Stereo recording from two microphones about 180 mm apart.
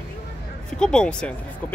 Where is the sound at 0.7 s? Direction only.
5° left (ahead or behind).